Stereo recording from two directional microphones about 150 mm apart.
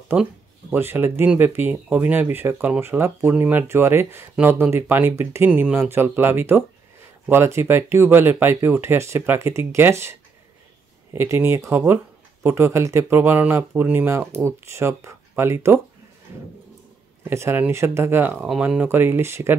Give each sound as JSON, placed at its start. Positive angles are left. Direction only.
{"t": 0.1, "sound": "speech", "side_deg": -10}
{"t": 11.1, "sound": "speech", "side_deg": -15}
{"t": 17.2, "sound": "speech", "side_deg": -15}